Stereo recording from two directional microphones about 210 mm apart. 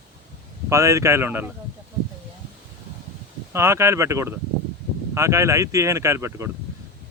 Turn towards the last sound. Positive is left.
turn(degrees=-15)  # may be behind; listen again after turning